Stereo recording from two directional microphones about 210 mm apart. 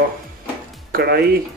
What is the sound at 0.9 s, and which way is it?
Speech, 50° right (ahead or behind).